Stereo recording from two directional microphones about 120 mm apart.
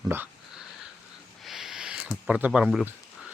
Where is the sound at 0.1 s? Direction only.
20° right (ahead or behind).